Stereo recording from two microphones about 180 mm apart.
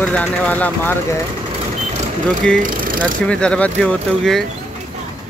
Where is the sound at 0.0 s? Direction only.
10° left (ahead or behind).